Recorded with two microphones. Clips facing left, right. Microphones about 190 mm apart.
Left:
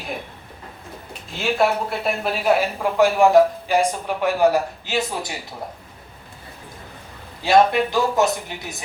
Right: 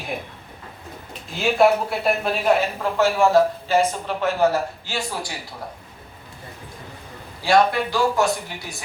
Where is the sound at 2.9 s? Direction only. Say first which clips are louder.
Left 3 dB; 15° left (ahead or behind).